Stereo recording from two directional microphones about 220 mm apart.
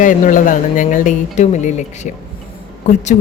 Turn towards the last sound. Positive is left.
turn(degrees=35)  # may be behind; listen again after turning